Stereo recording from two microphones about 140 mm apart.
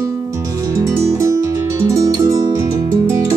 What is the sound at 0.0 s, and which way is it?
Music, 20° right (ahead or behind).